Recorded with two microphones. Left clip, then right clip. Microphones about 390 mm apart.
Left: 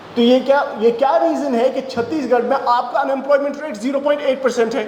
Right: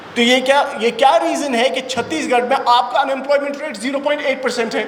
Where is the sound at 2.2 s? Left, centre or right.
Centre.